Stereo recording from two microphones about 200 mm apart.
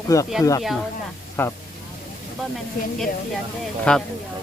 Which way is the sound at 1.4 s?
10° left (ahead or behind).